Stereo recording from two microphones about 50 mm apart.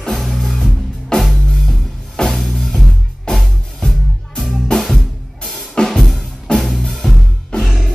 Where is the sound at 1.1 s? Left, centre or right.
Centre.